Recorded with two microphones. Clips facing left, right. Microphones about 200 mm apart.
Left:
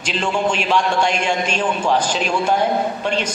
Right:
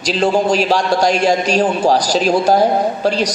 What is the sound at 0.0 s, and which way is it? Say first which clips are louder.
A woman's voice: right 6 dB; 35° right (ahead or behind).